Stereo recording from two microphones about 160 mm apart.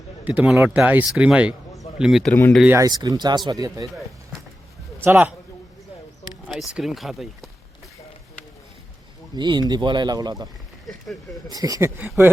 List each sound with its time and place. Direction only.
0.3 s speech: 10° right (ahead or behind)
2.6 s speech: 20° right (ahead or behind)
6.5 s speech: 5° right (ahead or behind)
9.3 s speech: 25° right (ahead or behind)
10.8 s speech: centre (ahead or behind)
11.5 s speech: 20° right (ahead or behind)
11.9 s speech: 10° right (ahead or behind)